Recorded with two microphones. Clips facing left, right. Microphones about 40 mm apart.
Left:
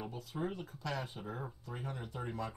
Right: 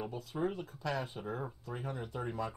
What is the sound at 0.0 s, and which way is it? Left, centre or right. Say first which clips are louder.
Speech: right 4 dB; centre.